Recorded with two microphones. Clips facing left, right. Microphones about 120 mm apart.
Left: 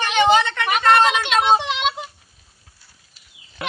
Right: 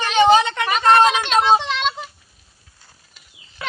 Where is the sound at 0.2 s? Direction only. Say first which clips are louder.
Right 3 dB; 20° right (ahead or behind).